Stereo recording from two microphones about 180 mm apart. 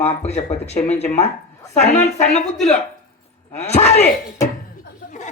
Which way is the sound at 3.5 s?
35° left (ahead or behind).